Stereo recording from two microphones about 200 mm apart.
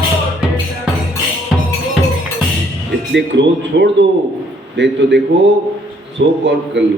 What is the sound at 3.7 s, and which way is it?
A man's voice, 60° right (ahead or behind).